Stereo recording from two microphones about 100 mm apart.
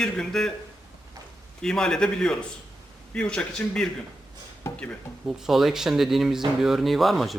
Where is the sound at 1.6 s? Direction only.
5° left (ahead or behind).